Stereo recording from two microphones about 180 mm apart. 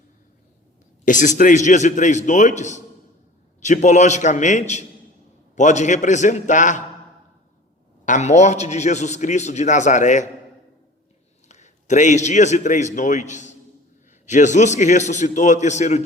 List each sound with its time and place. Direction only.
1.0 s a man's voice: 45° left (ahead or behind)
8.0 s a man's voice: 40° left (ahead or behind)
11.4 s a man's voice: 40° left (ahead or behind)